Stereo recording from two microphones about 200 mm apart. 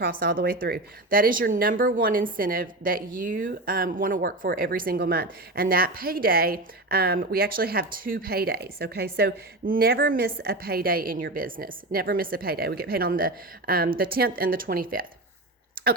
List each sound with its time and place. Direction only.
0.0 s speech: 45° right (ahead or behind)
15.7 s clicking: 45° right (ahead or behind)